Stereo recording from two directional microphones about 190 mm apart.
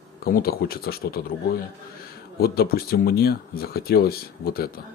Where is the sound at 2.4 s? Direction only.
55° left (ahead or behind).